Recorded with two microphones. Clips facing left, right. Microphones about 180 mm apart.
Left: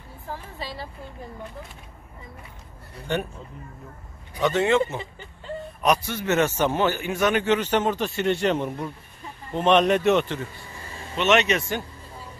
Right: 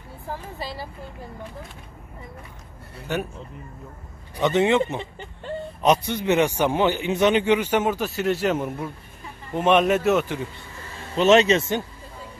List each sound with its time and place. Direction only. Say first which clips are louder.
3.1 s speech: even; 5° right (ahead or behind)
4.4 s a man's voice: right 1 dB; 20° right (ahead or behind)
11.1 s a man's voice: right 5 dB; 30° right (ahead or behind)